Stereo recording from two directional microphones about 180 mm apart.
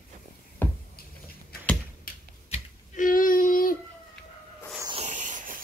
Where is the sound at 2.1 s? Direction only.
50° left (ahead or behind).